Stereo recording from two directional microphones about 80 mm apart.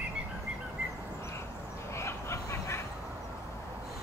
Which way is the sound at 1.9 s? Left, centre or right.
Left.